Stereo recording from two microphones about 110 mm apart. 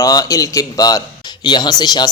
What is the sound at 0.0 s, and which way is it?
Speech, 35° left (ahead or behind).